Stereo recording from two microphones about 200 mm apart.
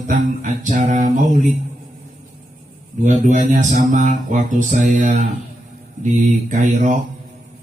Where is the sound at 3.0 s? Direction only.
40° right (ahead or behind).